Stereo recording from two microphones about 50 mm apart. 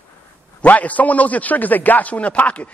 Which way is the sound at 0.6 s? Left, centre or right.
Left.